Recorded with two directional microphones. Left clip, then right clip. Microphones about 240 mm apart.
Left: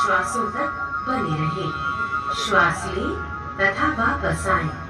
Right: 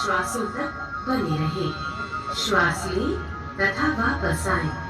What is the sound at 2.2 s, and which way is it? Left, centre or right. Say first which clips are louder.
A woman's voice: left 2 dB; right.